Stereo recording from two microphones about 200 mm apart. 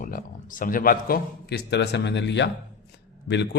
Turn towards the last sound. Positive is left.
turn(degrees=60)  # may be behind; listen again after turning